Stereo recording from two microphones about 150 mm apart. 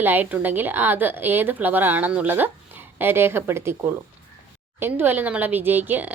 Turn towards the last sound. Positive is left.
turn(degrees=-10)  # may be behind; listen again after turning